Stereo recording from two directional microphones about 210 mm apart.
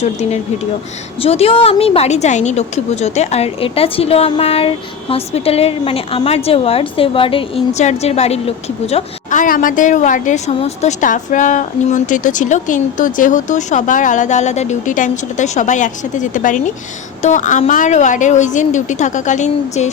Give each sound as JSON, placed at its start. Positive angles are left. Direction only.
{"t": 0.0, "sound": "a woman's voice", "side_deg": 30}